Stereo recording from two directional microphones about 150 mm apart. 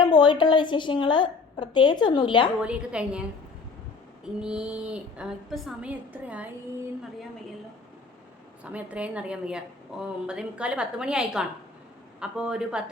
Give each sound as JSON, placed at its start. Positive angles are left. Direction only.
{"t": 0.0, "sound": "a woman's voice", "side_deg": 30}
{"t": 2.6, "sound": "a woman's voice", "side_deg": -5}
{"t": 4.4, "sound": "a woman's voice", "side_deg": -5}
{"t": 8.6, "sound": "a woman's voice", "side_deg": -10}